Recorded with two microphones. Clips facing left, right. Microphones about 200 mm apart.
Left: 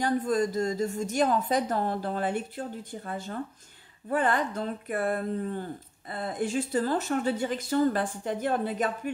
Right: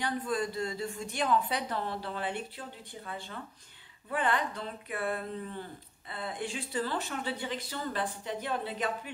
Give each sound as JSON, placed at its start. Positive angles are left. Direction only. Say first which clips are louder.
{"t": 0.0, "sound": "speech", "louder": "left 7 dB", "side_deg": 45}